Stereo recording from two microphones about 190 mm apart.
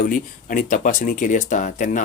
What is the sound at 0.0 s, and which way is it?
Speech, 45° left (ahead or behind).